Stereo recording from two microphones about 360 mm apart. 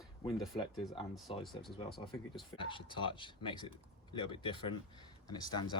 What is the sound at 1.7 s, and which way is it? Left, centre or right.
Speech, centre.